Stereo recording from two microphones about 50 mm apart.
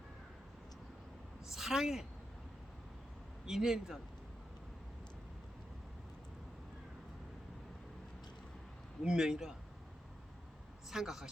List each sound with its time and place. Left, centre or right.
1.5 s a woman's voice: centre
3.4 s a man's voice: centre
9.0 s a man's voice: centre
10.9 s a man's voice: centre